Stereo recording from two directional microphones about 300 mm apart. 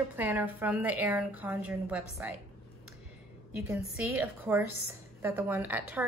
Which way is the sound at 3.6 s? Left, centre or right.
Centre.